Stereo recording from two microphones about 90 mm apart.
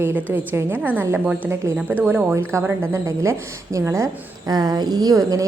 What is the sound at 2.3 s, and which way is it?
A woman's voice, 30° right (ahead or behind).